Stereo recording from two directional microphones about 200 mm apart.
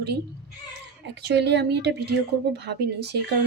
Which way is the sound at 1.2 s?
55° right (ahead or behind).